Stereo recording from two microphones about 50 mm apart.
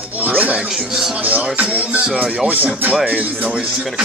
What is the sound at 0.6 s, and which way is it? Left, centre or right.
Speech, centre.